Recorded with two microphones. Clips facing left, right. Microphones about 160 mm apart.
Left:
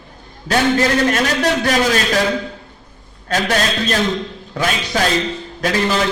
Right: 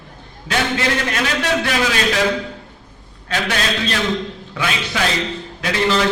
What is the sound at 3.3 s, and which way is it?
A man's voice, 40° left (ahead or behind).